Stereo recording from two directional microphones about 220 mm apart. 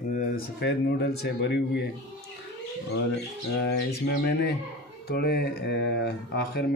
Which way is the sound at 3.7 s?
50° left (ahead or behind).